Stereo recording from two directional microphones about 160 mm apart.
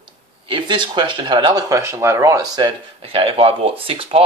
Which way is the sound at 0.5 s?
30° right (ahead or behind).